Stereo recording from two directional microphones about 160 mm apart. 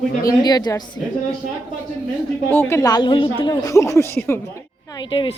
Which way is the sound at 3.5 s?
20° left (ahead or behind).